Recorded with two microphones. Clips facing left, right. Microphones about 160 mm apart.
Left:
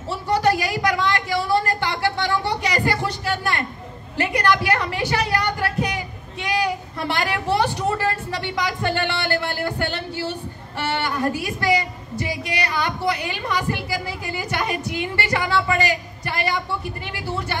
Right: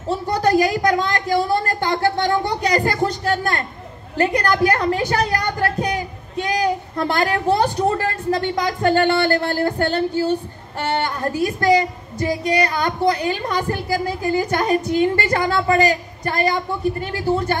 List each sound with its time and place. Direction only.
0.1 s a woman's voice: 45° right (ahead or behind)
10.8 s a sound: 45° right (ahead or behind)
11.4 s a woman's voice: 45° right (ahead or behind)